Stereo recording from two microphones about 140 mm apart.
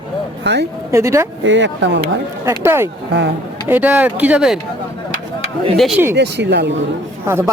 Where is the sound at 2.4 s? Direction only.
20° right (ahead or behind).